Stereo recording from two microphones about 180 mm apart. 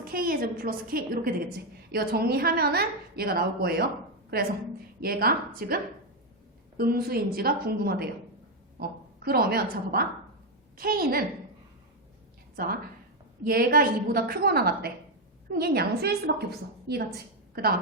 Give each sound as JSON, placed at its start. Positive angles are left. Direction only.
{"t": 0.0, "sound": "a woman's voice", "side_deg": -55}
{"t": 4.9, "sound": "a woman's voice", "side_deg": -55}
{"t": 12.5, "sound": "a woman's voice", "side_deg": -55}